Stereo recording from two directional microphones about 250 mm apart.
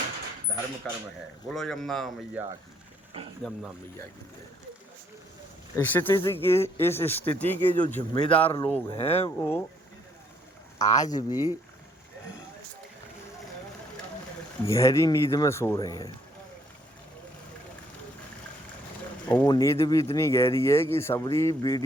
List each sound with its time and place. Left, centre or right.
0.9 s speech: centre
5.7 s speech: centre
8.1 s speech: left
9.4 s speech: centre
10.8 s speech: centre
14.7 s speech: centre
19.3 s speech: centre